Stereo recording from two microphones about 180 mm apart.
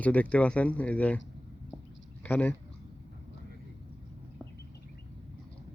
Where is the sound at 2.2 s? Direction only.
10° left (ahead or behind).